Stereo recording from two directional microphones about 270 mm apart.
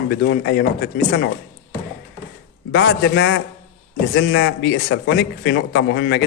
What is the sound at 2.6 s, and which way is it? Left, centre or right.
Speech, left.